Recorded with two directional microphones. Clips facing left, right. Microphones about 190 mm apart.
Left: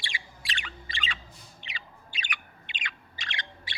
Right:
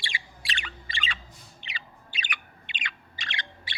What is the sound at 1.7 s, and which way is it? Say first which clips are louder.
Bird: right 2 dB; 75° right (ahead or behind).